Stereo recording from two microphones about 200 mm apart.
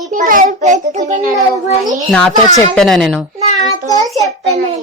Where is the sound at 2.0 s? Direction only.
5° left (ahead or behind).